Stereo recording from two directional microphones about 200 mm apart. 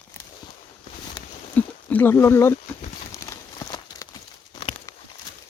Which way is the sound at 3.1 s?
15° left (ahead or behind).